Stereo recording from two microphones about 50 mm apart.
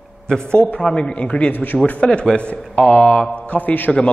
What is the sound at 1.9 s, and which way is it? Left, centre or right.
Speech, centre.